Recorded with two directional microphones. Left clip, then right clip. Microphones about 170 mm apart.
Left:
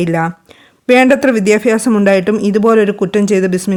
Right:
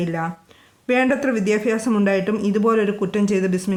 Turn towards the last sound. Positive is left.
turn(degrees=45)  # may be behind; listen again after turning